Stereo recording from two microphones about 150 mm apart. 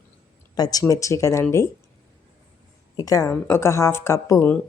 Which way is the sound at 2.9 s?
25° left (ahead or behind).